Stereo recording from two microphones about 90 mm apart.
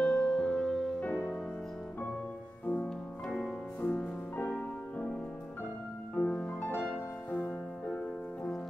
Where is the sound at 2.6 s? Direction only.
15° left (ahead or behind).